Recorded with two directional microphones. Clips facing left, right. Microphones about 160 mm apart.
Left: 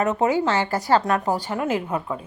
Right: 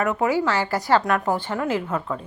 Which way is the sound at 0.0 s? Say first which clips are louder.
Left 1 dB; 20° left (ahead or behind).